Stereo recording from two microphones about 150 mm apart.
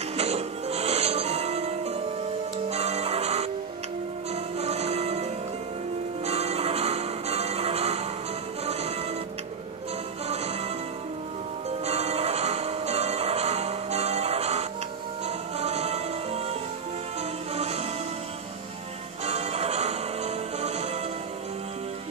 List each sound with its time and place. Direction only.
0.2 s music: 45° right (ahead or behind)
2.7 s tick-tock: 45° right (ahead or behind)
4.6 s music: 45° right (ahead or behind)
6.2 s change ringing: 45° right (ahead or behind)
10.2 s music: 45° right (ahead or behind)
11.8 s music: 45° right (ahead or behind)
17.6 s music: 45° right (ahead or behind)
19.2 s music: 45° right (ahead or behind)